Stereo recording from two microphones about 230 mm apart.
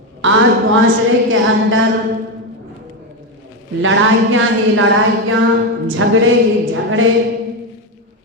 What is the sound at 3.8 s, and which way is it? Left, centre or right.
A woman's voice, right.